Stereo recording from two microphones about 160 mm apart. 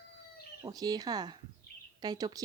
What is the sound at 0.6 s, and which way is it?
Speech, 25° right (ahead or behind).